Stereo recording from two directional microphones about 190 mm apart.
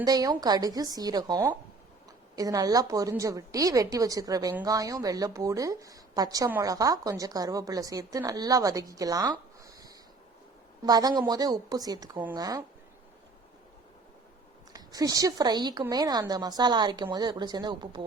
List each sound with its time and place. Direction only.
0.0 s a woman's voice: 20° right (ahead or behind)
14.7 s a woman's voice: 20° right (ahead or behind)